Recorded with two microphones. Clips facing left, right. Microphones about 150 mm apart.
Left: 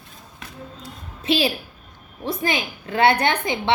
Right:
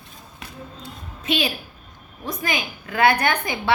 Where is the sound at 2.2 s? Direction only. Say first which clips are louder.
Left 3 dB; 30° left (ahead or behind).